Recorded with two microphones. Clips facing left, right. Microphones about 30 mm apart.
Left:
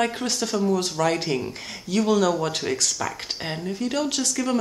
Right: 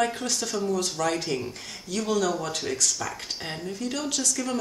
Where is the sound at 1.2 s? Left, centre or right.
Centre.